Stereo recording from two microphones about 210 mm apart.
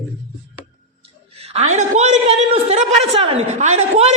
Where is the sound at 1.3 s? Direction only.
30° right (ahead or behind).